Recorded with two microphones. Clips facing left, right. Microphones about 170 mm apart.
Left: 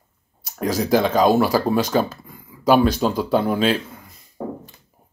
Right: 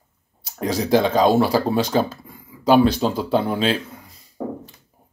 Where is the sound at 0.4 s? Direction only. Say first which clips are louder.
Left 1 dB; 25° right (ahead or behind).